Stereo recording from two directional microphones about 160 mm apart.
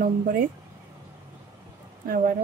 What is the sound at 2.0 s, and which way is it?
Speech, 65° right (ahead or behind).